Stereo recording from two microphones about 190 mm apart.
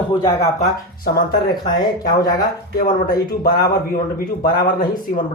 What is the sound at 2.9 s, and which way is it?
Speech, 50° left (ahead or behind).